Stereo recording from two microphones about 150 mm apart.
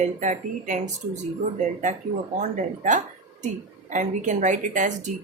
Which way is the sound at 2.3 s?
55° right (ahead or behind).